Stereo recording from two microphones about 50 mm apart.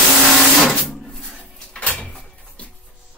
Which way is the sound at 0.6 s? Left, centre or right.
Centre.